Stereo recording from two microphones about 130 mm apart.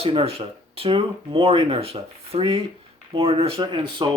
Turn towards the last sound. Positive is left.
turn(degrees=-35)  # may be behind; listen again after turning